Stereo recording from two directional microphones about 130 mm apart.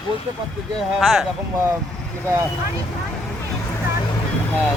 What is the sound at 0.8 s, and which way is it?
Speech, centre (ahead or behind).